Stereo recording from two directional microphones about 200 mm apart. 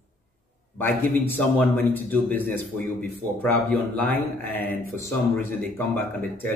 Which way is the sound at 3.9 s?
10° left (ahead or behind).